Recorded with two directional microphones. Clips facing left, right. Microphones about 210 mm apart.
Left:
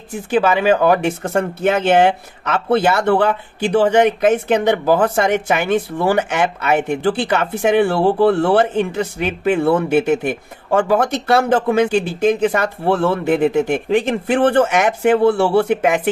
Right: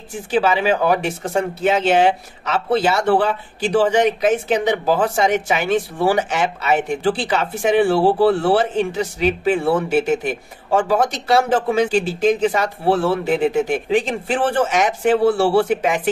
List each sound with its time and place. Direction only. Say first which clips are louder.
0.1 s speech: left 2 dB; 55° left (ahead or behind)